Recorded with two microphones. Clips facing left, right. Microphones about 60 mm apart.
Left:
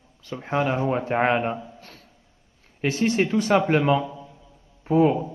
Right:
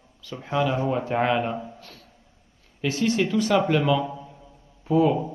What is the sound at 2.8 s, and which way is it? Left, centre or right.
A man's voice, left.